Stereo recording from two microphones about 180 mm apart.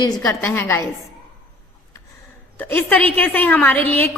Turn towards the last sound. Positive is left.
turn(degrees=10)  # may be behind; listen again after turning